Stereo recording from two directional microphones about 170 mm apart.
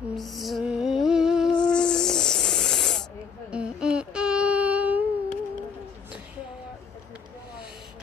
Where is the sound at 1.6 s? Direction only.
5° left (ahead or behind).